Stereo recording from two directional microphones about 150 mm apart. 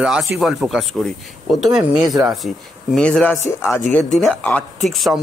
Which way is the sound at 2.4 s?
5° left (ahead or behind).